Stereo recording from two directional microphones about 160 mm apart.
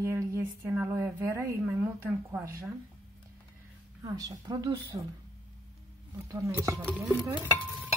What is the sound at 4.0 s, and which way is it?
Speech, 20° right (ahead or behind).